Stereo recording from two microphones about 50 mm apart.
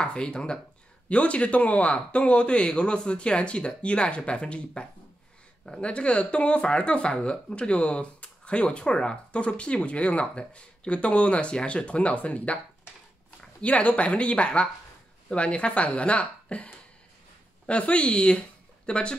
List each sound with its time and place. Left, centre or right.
0.0 s speech: centre